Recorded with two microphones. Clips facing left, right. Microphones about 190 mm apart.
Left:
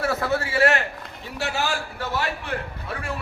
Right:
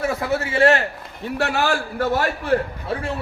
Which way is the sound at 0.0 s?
15° right (ahead or behind).